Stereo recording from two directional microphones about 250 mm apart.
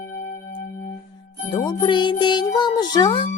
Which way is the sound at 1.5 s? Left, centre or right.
Centre.